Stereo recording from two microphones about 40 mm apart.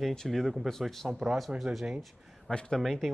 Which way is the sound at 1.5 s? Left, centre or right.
Right.